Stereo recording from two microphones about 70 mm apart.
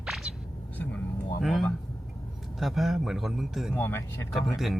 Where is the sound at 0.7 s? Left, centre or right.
Left.